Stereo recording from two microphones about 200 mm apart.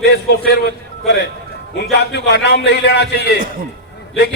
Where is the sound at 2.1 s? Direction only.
60° left (ahead or behind).